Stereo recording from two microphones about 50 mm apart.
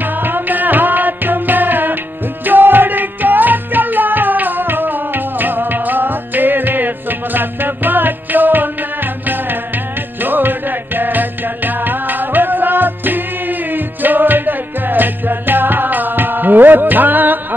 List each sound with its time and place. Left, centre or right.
0.0 s music: right